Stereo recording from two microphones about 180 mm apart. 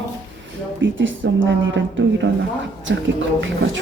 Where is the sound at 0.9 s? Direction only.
90° right.